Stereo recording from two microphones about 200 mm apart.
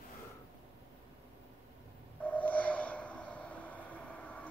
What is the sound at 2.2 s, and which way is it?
Train, 10° left (ahead or behind).